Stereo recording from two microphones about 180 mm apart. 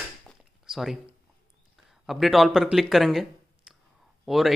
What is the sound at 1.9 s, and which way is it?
Speech, centre (ahead or behind).